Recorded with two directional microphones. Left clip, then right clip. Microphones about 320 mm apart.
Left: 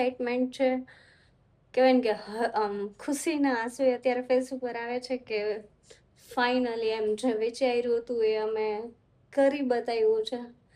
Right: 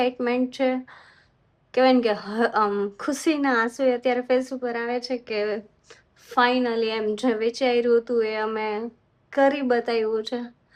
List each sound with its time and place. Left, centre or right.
0.0 s a woman's voice: right